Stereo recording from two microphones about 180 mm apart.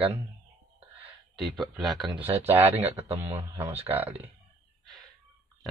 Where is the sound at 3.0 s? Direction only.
35° right (ahead or behind).